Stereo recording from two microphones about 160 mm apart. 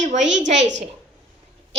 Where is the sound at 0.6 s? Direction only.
90° right.